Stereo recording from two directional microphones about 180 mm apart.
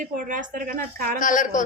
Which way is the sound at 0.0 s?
45° right (ahead or behind).